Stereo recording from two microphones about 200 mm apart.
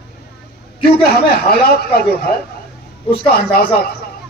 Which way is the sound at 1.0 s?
50° left (ahead or behind).